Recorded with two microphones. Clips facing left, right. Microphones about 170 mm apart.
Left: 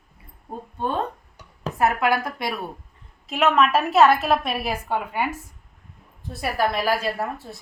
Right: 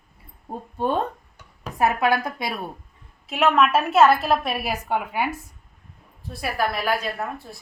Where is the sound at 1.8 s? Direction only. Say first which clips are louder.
Even; 15° right (ahead or behind).